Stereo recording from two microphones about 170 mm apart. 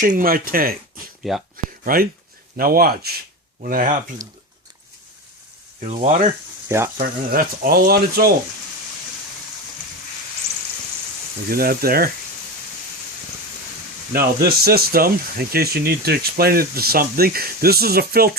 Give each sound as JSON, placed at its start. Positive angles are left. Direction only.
{"t": 0.0, "sound": "speech", "side_deg": -55}
{"t": 1.5, "sound": "a sound", "side_deg": -55}
{"t": 2.6, "sound": "speech", "side_deg": -60}
{"t": 5.8, "sound": "speech", "side_deg": -45}
{"t": 6.7, "sound": "speech", "side_deg": -15}
{"t": 7.0, "sound": "speech", "side_deg": -55}
{"t": 11.4, "sound": "speech", "side_deg": -60}
{"t": 14.1, "sound": "speech", "side_deg": -60}